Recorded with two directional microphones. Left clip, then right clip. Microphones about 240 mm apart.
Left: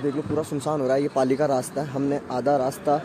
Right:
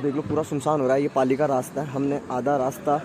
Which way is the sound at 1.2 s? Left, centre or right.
Centre.